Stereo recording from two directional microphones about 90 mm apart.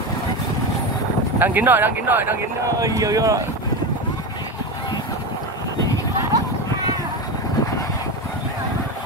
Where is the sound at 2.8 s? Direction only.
40° right (ahead or behind).